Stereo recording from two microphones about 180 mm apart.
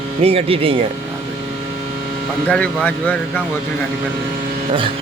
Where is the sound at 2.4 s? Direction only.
5° left (ahead or behind).